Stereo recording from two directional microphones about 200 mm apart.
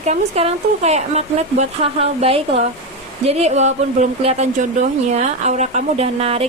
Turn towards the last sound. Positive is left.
turn(degrees=-30)  # may be behind; listen again after turning